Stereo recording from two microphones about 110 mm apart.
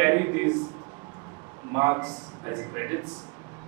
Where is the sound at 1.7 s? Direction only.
30° right (ahead or behind).